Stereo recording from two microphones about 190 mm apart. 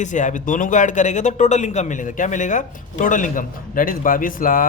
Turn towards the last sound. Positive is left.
turn(degrees=45)  # may be behind; listen again after turning